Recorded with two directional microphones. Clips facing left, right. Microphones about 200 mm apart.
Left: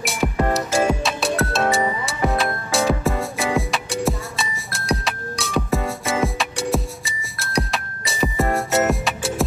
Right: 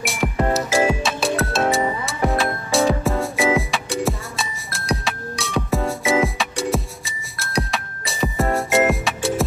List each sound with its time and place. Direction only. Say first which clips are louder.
0.0 s music: even; centre (ahead or behind)